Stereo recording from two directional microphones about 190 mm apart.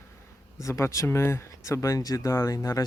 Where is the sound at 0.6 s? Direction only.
15° left (ahead or behind).